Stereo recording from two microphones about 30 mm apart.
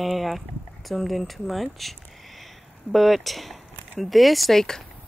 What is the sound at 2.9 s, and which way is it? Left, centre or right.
Speech, centre.